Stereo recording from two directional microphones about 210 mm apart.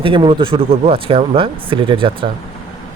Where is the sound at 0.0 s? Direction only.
25° right (ahead or behind).